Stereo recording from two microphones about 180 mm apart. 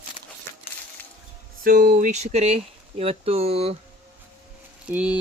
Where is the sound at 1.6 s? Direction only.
50° right (ahead or behind); by 3.7 s 35° right (ahead or behind).